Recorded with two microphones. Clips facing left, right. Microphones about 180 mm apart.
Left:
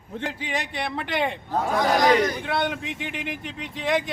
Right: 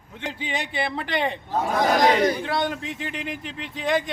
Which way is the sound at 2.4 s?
Centre (ahead or behind).